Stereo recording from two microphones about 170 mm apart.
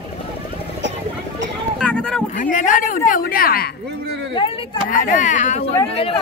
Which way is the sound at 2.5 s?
50° left (ahead or behind).